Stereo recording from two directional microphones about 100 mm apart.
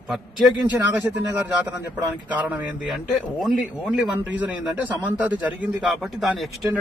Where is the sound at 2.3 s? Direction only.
15° right (ahead or behind).